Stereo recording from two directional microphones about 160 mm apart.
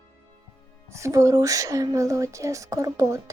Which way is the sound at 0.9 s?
20° right (ahead or behind).